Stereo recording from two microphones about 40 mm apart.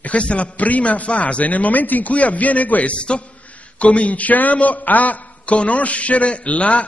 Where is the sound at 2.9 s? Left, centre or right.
Left.